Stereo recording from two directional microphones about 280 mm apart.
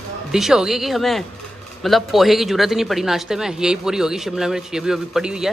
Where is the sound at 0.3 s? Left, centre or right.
Centre.